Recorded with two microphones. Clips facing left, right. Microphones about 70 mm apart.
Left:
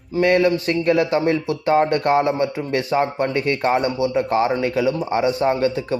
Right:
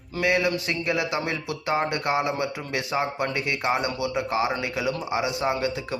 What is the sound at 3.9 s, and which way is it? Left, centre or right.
A man's voice, left.